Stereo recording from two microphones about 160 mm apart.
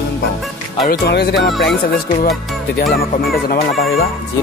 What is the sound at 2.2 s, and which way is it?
Speech, 75° left (ahead or behind).